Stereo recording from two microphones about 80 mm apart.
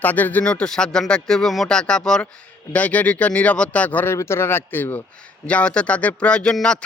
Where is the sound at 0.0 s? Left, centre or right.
Left.